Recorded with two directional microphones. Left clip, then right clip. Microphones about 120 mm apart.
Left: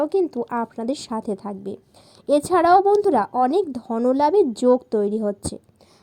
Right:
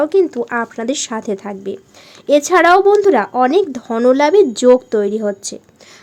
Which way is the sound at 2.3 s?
5° right (ahead or behind).